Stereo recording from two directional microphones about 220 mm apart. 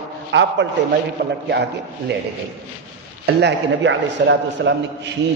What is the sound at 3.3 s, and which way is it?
A man's voice, 50° right (ahead or behind).